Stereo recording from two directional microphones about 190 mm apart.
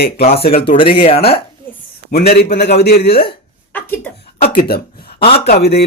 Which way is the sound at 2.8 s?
60° left (ahead or behind).